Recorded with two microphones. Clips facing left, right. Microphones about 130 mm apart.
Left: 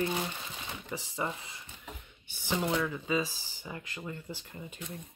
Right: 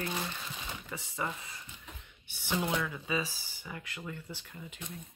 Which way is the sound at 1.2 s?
25° left (ahead or behind).